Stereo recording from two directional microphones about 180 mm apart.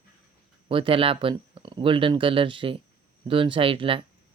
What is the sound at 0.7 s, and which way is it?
Speech, 30° right (ahead or behind).